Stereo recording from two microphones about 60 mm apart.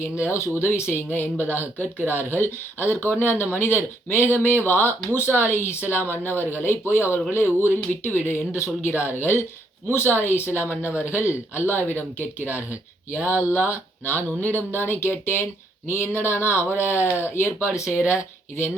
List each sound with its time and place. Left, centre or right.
0.0 s speech: left